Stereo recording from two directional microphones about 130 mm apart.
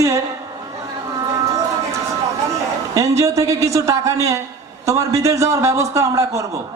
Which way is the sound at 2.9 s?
25° right (ahead or behind).